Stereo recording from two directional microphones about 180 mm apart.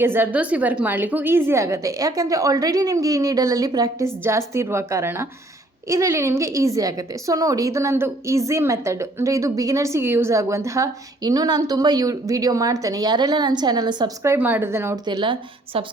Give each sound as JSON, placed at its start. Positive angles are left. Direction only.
{"t": 0.0, "sound": "a woman's voice", "side_deg": -10}
{"t": 14.3, "sound": "a woman's voice", "side_deg": -10}
{"t": 15.0, "sound": "a woman's voice", "side_deg": -25}